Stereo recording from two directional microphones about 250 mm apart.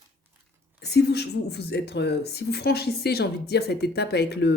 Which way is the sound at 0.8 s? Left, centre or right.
Left.